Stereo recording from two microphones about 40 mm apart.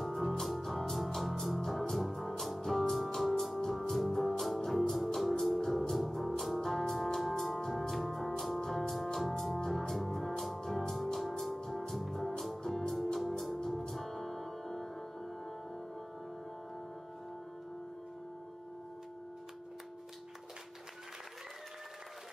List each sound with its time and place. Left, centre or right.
0.0 s music: centre
3.2 s organ: centre
3.9 s music: centre
8.6 s organ: centre
9.7 s music: centre
13.2 s music: centre
13.6 s music: centre